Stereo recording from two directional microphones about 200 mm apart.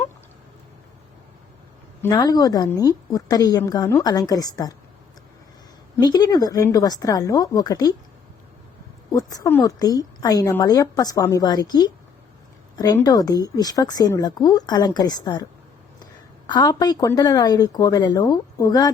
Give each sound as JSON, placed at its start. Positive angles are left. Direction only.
{"t": 2.0, "sound": "a woman's voice", "side_deg": 20}
{"t": 6.0, "sound": "a woman's voice", "side_deg": 20}
{"t": 9.0, "sound": "a woman's voice", "side_deg": 20}
{"t": 16.5, "sound": "a woman's voice", "side_deg": 20}